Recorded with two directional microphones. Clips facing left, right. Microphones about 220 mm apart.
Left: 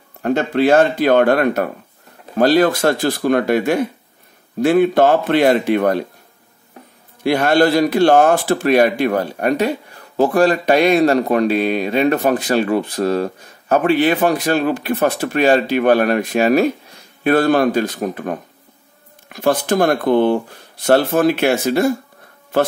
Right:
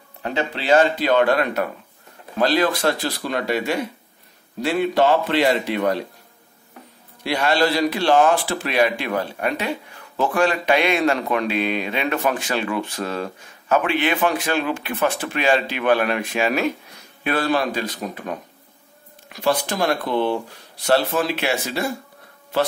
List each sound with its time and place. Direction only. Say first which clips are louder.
0.2 s speech: left 10 dB; 50° left (ahead or behind)
7.2 s a man's voice: left 6 dB; 50° left (ahead or behind)